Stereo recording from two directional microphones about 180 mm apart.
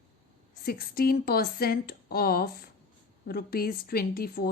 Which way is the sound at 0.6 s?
55° left (ahead or behind).